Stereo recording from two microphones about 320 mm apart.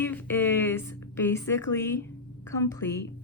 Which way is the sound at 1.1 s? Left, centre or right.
Centre.